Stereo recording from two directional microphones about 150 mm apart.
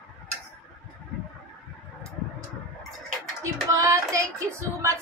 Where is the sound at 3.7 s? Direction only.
20° right (ahead or behind).